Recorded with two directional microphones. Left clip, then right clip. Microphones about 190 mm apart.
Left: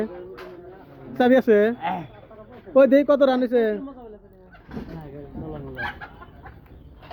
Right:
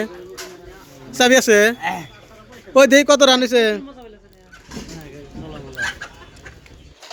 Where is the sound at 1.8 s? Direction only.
25° right (ahead or behind).